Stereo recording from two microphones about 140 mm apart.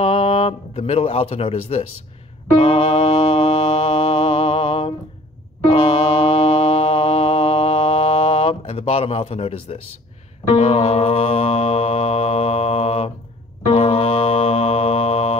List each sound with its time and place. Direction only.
0.0 s speech: 45° left (ahead or behind)
2.5 s mantra: 45° left (ahead or behind)
5.7 s music: 45° left (ahead or behind)
10.5 s mantra: 45° left (ahead or behind)
13.7 s music: 45° left (ahead or behind)